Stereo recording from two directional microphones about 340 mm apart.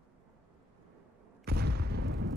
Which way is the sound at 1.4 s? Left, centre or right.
Right.